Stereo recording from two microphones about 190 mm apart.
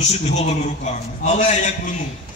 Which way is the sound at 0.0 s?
35° left (ahead or behind).